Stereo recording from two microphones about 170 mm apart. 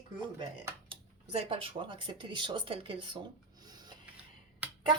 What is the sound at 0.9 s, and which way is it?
Speech, 35° right (ahead or behind).